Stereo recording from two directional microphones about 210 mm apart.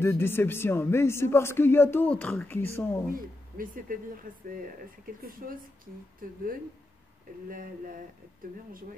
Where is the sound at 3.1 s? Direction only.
40° right (ahead or behind).